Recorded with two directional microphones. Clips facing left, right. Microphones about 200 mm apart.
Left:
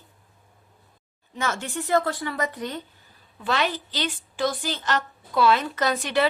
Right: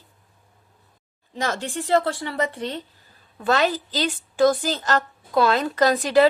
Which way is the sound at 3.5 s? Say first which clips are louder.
Right 5 dB; 40° right (ahead or behind).